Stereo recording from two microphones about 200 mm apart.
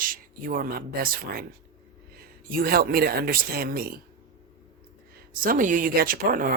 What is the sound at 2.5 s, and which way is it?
Speech, 45° right (ahead or behind).